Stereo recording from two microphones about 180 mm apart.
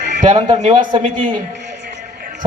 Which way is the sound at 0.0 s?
45° right (ahead or behind).